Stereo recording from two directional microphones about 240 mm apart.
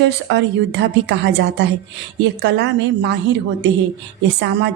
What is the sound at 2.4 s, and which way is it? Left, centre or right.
A woman's voice, right.